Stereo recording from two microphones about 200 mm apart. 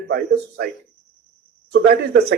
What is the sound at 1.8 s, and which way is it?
Speech, 55° right (ahead or behind).